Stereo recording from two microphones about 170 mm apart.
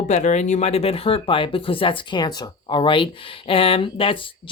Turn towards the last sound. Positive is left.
turn(degrees=30)  # may be behind; listen again after turning